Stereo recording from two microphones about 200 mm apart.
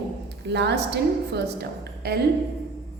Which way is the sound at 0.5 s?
55° right (ahead or behind).